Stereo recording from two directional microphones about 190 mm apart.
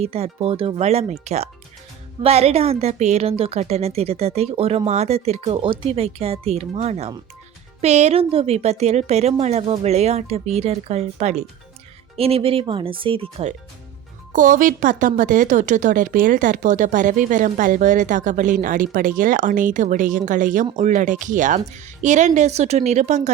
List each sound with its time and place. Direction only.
0.0 s a woman's voice: 30° right (ahead or behind)
14.3 s a woman's voice: 45° right (ahead or behind)